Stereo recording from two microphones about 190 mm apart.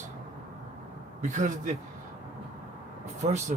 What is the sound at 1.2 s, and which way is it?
Speech, 40° right (ahead or behind).